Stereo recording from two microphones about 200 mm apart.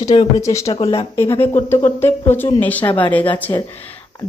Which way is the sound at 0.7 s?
25° left (ahead or behind).